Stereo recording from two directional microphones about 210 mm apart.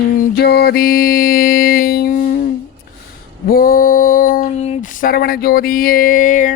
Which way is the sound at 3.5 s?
45° left (ahead or behind).